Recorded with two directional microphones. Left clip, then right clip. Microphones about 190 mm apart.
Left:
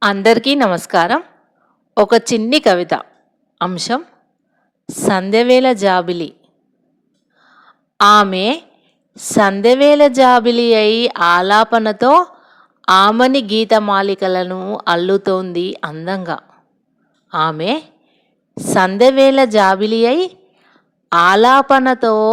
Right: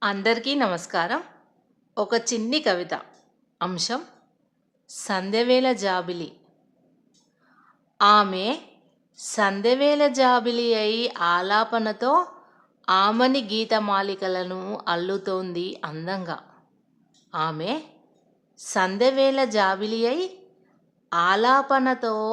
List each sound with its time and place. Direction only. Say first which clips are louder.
0.0 s a woman's voice: left 11 dB; 40° left (ahead or behind)
7.9 s a woman's voice: left 8 dB; 40° left (ahead or behind)
14.5 s speech: left 9 dB; 20° left (ahead or behind)
14.8 s a woman's voice: left 12 dB; 35° left (ahead or behind)
17.2 s a sound: left 10 dB; 40° left (ahead or behind)
17.5 s a woman's voice: left 10 dB; 35° left (ahead or behind)
18.9 s a woman's voice: left 11 dB; 35° left (ahead or behind)